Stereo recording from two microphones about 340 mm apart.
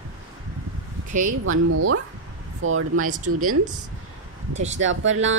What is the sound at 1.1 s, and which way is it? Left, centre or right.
Speech, right.